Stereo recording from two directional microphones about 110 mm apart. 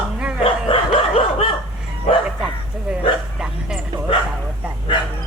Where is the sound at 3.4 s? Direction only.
5° right (ahead or behind).